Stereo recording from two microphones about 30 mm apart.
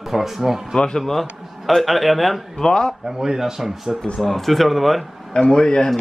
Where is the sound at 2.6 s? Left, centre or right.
Left.